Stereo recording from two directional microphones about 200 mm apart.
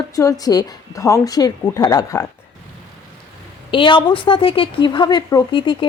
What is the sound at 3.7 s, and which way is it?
Speech, 25° left (ahead or behind).